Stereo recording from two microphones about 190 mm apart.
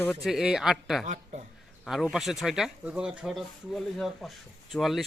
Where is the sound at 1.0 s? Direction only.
40° right (ahead or behind).